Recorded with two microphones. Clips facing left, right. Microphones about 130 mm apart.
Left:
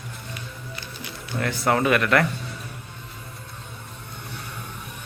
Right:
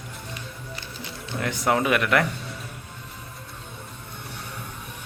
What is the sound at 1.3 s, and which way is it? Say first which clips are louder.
Speech: left 1 dB; 15° right (ahead or behind).